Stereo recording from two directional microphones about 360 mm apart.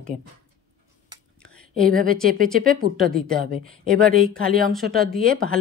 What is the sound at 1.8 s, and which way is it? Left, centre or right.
Speech, right.